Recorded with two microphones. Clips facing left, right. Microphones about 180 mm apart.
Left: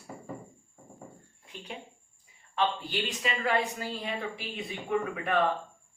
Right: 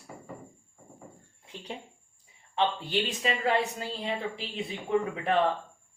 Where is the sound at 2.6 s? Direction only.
25° right (ahead or behind).